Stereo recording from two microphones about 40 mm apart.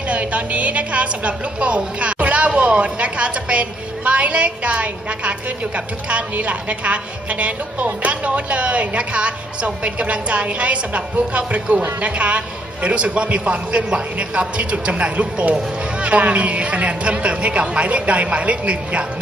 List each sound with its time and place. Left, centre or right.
0.1 s a woman's voice: right